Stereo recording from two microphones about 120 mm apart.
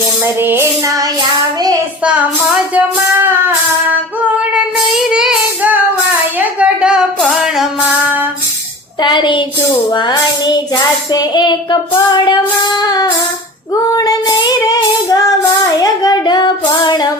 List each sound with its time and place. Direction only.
0.3 s music: 20° right (ahead or behind)
2.0 s music: 15° right (ahead or behind)
5.0 s child singing: 5° right (ahead or behind)
6.1 s a sound: 10° right (ahead or behind)
7.2 s music: centre (ahead or behind)
9.0 s a sound: 40° left (ahead or behind)
9.9 s child singing: 40° left (ahead or behind)
12.9 s music: 35° left (ahead or behind)
13.9 s female singing: 30° left (ahead or behind)
15.8 s child singing: 35° left (ahead or behind)